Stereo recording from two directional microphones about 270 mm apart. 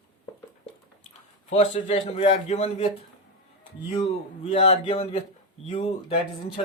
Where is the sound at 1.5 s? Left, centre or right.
Left.